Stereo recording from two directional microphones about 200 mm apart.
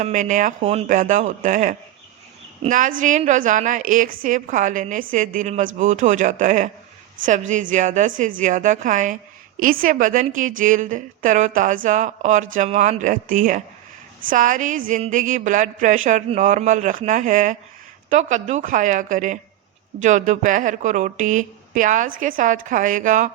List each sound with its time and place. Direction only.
0.0 s a woman's voice: 40° right (ahead or behind)